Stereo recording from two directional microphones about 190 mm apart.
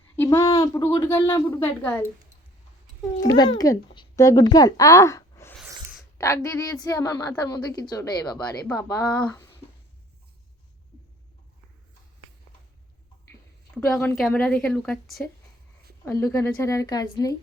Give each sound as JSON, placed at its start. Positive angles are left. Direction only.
{"t": 0.2, "sound": "a woman's voice", "side_deg": 15}
{"t": 3.3, "sound": "a woman's voice", "side_deg": 25}
{"t": 13.7, "sound": "a woman's voice", "side_deg": 5}
{"t": 16.0, "sound": "a woman's voice", "side_deg": 15}